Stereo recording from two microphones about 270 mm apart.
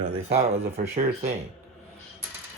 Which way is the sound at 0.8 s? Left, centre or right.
Right.